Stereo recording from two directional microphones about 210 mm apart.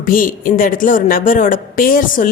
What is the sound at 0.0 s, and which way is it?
Speech, 40° left (ahead or behind).